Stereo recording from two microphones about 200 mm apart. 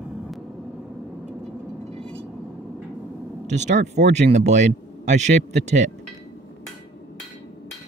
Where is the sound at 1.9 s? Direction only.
30° right (ahead or behind).